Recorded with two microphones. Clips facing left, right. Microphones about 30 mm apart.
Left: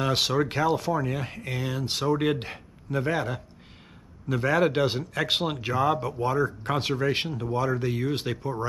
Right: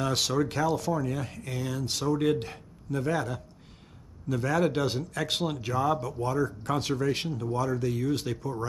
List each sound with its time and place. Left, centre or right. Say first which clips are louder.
0.0 s speech: left 3 dB; left